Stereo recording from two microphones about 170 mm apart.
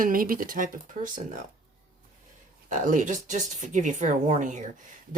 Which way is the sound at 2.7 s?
50° right (ahead or behind).